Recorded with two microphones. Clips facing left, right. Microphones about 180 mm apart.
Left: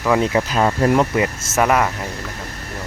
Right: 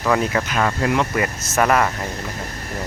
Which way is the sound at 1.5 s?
10° left (ahead or behind).